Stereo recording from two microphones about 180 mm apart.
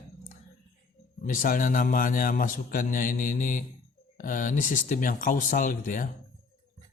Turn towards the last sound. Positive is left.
turn(degrees=45)  # may be behind; listen again after turning